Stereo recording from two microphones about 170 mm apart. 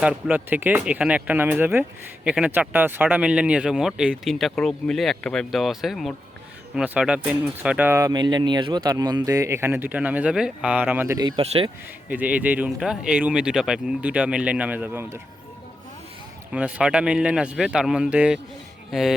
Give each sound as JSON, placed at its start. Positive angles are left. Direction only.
{"t": 0.0, "sound": "speech", "side_deg": -5}
{"t": 11.2, "sound": "speech", "side_deg": -30}
{"t": 12.0, "sound": "speech", "side_deg": -10}
{"t": 16.5, "sound": "speech", "side_deg": -5}